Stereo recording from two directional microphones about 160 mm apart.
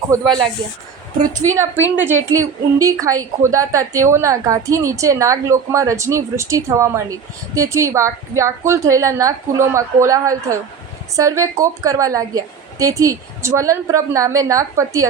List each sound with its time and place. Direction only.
0.1 s a woman's voice: 25° right (ahead or behind)
1.5 s a woman's voice: 15° right (ahead or behind)